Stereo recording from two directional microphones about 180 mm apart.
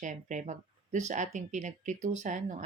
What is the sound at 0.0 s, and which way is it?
Speech, 45° right (ahead or behind).